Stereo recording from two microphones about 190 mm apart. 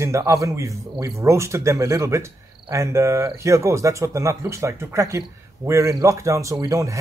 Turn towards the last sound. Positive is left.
turn(degrees=-15)  # may be behind; listen again after turning